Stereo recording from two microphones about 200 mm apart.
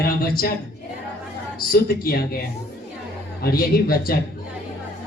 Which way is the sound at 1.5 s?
50° left (ahead or behind).